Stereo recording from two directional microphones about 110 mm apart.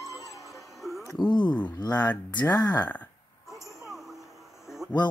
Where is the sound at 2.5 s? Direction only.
35° left (ahead or behind).